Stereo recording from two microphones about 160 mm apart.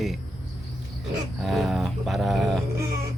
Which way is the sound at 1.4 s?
Centre (ahead or behind).